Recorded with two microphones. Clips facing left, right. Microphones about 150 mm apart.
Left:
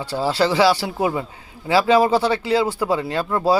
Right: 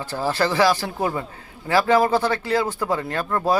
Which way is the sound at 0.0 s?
10° left (ahead or behind).